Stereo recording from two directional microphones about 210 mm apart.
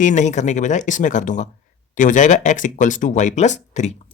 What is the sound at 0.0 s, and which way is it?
Speech, 35° left (ahead or behind).